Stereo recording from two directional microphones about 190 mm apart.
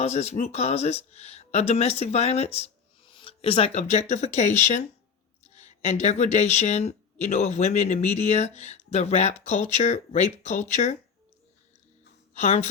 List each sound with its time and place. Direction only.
0.0 s speech: 35° left (ahead or behind)
12.3 s speech: 35° left (ahead or behind)